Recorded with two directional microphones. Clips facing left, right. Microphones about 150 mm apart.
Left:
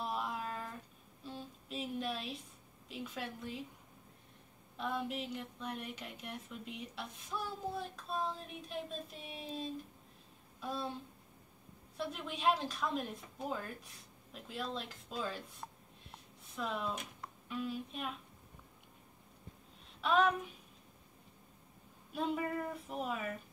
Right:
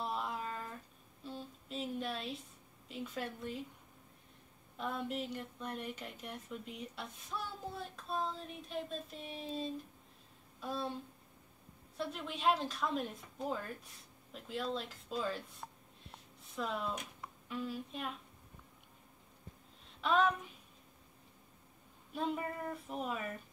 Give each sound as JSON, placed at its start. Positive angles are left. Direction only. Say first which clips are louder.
{"t": 0.0, "sound": "a sound", "louder": "even", "side_deg": 0}
{"t": 2.9, "sound": "speech", "louder": "right 1 dB", "side_deg": 0}
{"t": 4.7, "sound": "speech", "louder": "even", "side_deg": 0}
{"t": 12.0, "sound": "speech", "louder": "even", "side_deg": 0}
{"t": 20.0, "sound": "speech", "louder": "left 1 dB", "side_deg": 0}
{"t": 22.1, "sound": "speech", "louder": "left 2 dB", "side_deg": 0}